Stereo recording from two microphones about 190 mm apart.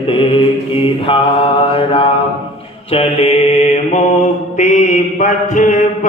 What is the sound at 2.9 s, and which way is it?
Mantra, 30° left (ahead or behind).